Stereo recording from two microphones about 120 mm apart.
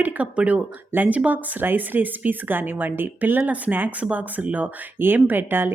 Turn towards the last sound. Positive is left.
turn(degrees=-15)  # may be behind; listen again after turning